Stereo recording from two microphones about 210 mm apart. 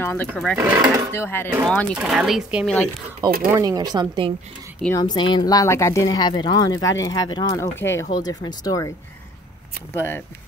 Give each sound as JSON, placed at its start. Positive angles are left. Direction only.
{"t": 0.0, "sound": "speech", "side_deg": 10}
{"t": 0.3, "sound": "speech", "side_deg": 0}
{"t": 1.1, "sound": "speech", "side_deg": 10}
{"t": 2.0, "sound": "speech", "side_deg": -5}
{"t": 3.2, "sound": "speech", "side_deg": -20}
{"t": 4.8, "sound": "speech", "side_deg": 15}
{"t": 9.9, "sound": "speech", "side_deg": 10}